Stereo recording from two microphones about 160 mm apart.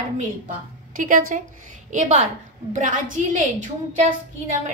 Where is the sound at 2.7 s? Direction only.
55° right (ahead or behind).